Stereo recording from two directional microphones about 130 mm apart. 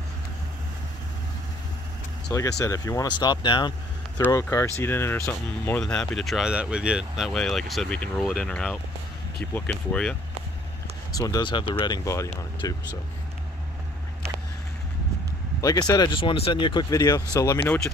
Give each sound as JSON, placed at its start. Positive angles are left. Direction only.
{"t": 2.3, "sound": "speech", "side_deg": 25}
{"t": 4.3, "sound": "speech", "side_deg": 20}
{"t": 5.8, "sound": "speech", "side_deg": 5}
{"t": 11.1, "sound": "speech", "side_deg": 30}
{"t": 15.6, "sound": "speech", "side_deg": 30}
{"t": 17.6, "sound": "speech", "side_deg": 10}